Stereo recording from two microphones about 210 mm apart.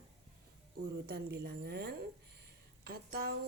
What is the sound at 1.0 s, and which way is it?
Speech, 50° right (ahead or behind).